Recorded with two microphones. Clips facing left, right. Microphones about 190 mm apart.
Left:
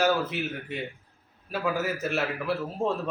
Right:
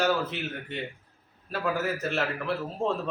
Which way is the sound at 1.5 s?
Centre (ahead or behind).